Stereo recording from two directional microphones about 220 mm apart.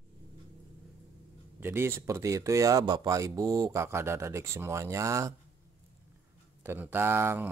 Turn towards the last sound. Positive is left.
turn(degrees=-10)  # may be behind; listen again after turning